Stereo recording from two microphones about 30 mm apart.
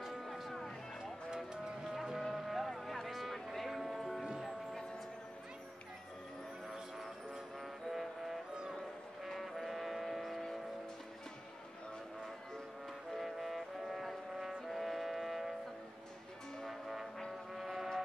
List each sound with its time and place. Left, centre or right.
0.0 s music: centre
1.3 s a sound: right
2.1 s music: centre
7.9 s music: centre
9.4 s music: centre
13.2 s music: centre
16.6 s brass instrument: centre
17.6 s foghorn: centre